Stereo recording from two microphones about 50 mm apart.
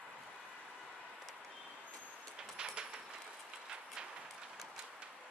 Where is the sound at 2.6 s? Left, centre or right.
Centre.